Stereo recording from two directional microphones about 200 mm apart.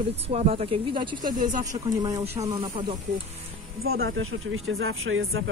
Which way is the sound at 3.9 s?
55° right (ahead or behind).